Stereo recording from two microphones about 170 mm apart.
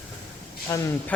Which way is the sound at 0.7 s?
20° left (ahead or behind).